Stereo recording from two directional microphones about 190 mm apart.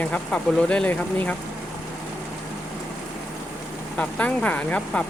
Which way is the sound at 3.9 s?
5° left (ahead or behind).